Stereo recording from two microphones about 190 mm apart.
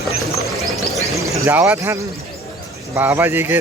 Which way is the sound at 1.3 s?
10° right (ahead or behind).